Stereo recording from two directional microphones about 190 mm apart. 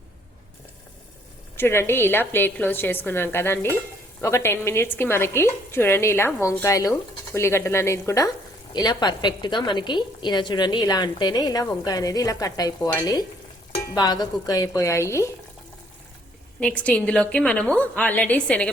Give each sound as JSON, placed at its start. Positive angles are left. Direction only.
{"t": 1.5, "sound": "a woman's voice", "side_deg": 15}
{"t": 16.6, "sound": "a woman's voice", "side_deg": 5}